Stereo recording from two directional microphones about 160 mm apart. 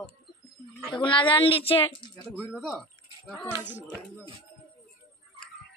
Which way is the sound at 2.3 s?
Centre (ahead or behind).